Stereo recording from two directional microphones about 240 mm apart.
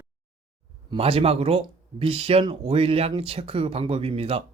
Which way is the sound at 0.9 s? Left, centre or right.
Right.